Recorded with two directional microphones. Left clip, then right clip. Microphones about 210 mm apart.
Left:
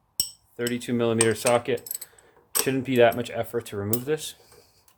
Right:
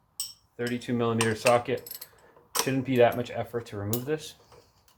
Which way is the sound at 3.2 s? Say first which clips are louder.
Left 3 dB; 55° left (ahead or behind).